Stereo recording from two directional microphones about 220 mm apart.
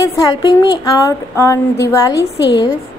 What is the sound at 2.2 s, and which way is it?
Speech, 50° left (ahead or behind).